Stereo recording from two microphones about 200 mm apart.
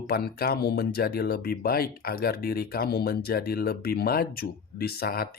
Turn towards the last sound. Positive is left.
turn(degrees=50)  # may be behind; listen again after turning